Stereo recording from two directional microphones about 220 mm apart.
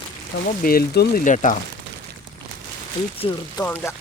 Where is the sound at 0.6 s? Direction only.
40° left (ahead or behind).